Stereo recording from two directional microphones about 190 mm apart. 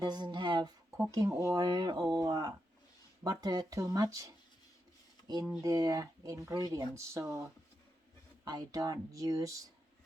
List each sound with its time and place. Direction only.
0.0 s speech: 20° right (ahead or behind)
5.6 s speech: 20° right (ahead or behind)
8.4 s speech: 20° right (ahead or behind)